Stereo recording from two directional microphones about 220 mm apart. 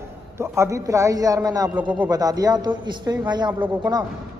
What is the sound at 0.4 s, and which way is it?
A woman's voice, 15° right (ahead or behind).